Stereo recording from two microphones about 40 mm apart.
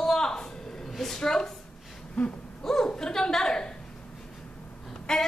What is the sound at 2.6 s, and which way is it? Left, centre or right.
A woman's voice, centre.